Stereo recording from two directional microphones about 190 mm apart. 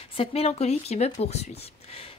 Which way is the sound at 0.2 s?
30° left (ahead or behind).